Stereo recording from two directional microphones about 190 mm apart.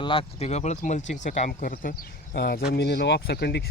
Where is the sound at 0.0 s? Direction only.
30° left (ahead or behind).